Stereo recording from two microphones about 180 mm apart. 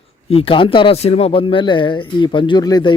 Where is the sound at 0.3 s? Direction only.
30° left (ahead or behind).